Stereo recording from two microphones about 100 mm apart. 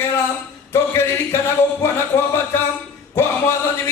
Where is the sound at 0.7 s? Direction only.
25° left (ahead or behind).